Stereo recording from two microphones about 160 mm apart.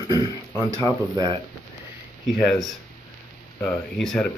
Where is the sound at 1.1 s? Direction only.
30° right (ahead or behind).